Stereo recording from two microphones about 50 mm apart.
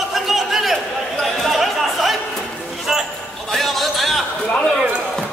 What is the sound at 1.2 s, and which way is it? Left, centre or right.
Chatter, centre.